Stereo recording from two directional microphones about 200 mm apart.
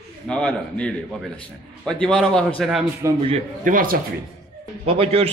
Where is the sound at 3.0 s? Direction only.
15° right (ahead or behind).